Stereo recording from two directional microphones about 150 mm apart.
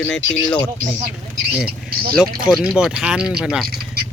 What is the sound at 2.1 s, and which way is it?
Speech, 5° right (ahead or behind).